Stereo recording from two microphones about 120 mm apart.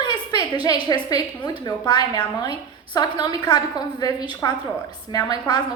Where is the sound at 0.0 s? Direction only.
35° left (ahead or behind).